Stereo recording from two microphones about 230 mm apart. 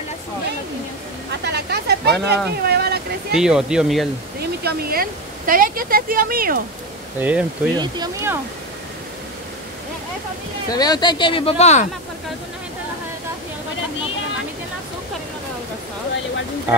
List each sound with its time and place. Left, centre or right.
1.4 s a sound: right
3.3 s speech: centre
4.6 s speech: right
7.2 s speech: centre
7.7 s speech: centre
10.7 s speech: centre